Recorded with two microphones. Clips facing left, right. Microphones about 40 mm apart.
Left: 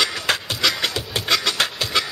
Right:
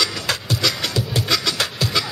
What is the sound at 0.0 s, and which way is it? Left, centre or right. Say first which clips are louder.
Music: left 1 dB; left.